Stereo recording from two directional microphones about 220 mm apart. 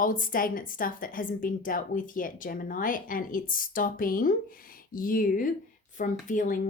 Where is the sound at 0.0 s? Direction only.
40° left (ahead or behind).